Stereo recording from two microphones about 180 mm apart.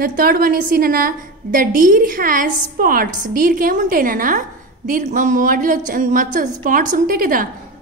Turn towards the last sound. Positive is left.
turn(degrees=-50)  # may be behind; listen again after turning